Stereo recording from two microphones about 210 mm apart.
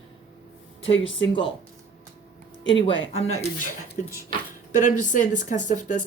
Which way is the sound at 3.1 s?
30° left (ahead or behind).